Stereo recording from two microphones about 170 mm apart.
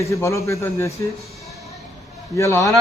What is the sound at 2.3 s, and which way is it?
Speech, 15° left (ahead or behind).